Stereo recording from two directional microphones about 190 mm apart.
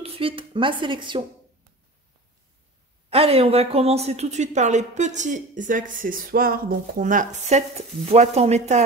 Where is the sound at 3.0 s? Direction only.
30° right (ahead or behind).